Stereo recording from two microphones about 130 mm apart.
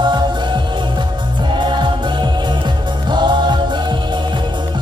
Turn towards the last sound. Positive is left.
turn(degrees=-35)  # may be behind; listen again after turning